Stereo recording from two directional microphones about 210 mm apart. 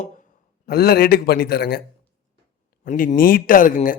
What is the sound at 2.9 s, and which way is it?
Speech, 40° left (ahead or behind).